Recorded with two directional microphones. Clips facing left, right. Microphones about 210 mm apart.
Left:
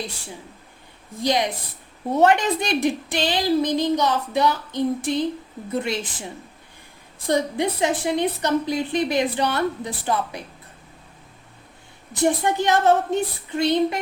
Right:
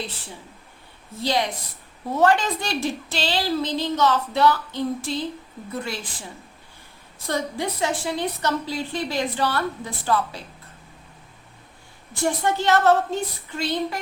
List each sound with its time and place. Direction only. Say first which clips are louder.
1.2 s a woman's voice: left 2 dB; 20° left (ahead or behind)
3.2 s female singing: left 4 dB; 15° left (ahead or behind)
5.7 s a woman's voice: left 6 dB; 20° left (ahead or behind)
12.2 s a woman's voice: left 2 dB; 15° left (ahead or behind)